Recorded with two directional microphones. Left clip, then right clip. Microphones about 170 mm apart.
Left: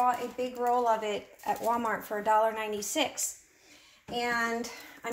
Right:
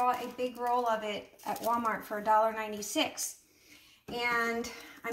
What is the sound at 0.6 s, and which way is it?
Speech, 40° left (ahead or behind).